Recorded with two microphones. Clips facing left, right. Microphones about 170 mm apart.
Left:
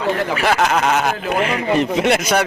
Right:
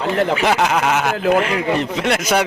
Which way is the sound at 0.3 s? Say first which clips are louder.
Even; 15° right (ahead or behind).